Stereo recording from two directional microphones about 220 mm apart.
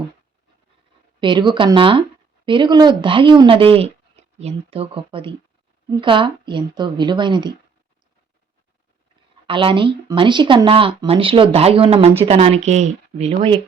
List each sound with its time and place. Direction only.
1.2 s speech: 20° right (ahead or behind)
9.5 s speech: 25° right (ahead or behind)